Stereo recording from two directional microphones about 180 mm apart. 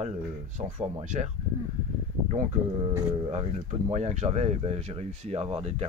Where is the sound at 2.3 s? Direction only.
40° right (ahead or behind).